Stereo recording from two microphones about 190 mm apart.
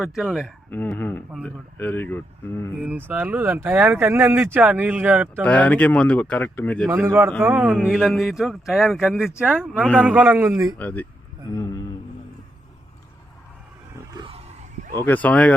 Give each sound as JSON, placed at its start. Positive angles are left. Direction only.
{"t": 0.0, "sound": "speech", "side_deg": 0}
{"t": 0.7, "sound": "speech", "side_deg": 10}
{"t": 2.8, "sound": "speech", "side_deg": -10}
{"t": 5.3, "sound": "speech", "side_deg": 5}
{"t": 6.8, "sound": "speech", "side_deg": -15}
{"t": 10.8, "sound": "speech", "side_deg": 10}
{"t": 11.5, "sound": "a sound", "side_deg": 15}
{"t": 14.1, "sound": "a sound", "side_deg": -25}
{"t": 14.9, "sound": "speech", "side_deg": 10}